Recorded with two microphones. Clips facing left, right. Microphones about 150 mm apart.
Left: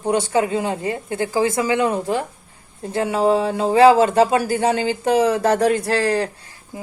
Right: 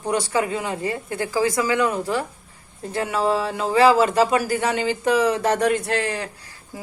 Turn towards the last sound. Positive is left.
turn(degrees=35)  # may be behind; listen again after turning